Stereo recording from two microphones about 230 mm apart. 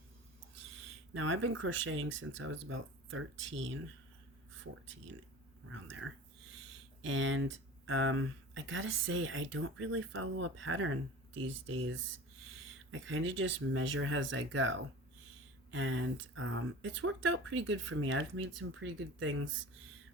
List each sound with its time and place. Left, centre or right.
1.1 s speech: right
5.6 s speech: right
11.3 s speech: right
11.6 s speech: right